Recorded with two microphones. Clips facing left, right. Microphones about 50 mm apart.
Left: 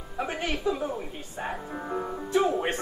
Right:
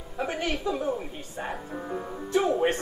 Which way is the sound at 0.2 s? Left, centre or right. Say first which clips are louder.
Right 1 dB; centre.